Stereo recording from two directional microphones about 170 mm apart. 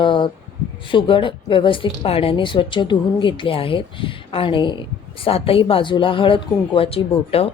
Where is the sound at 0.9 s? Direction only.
30° left (ahead or behind).